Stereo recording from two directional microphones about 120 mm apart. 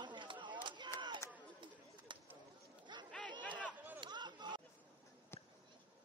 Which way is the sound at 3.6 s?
15° right (ahead or behind).